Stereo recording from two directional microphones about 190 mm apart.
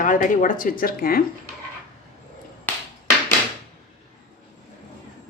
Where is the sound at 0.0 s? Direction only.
45° left (ahead or behind).